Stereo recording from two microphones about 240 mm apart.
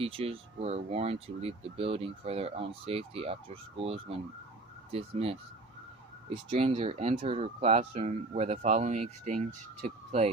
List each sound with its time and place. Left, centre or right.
0.0 s speech: right
6.5 s speech: right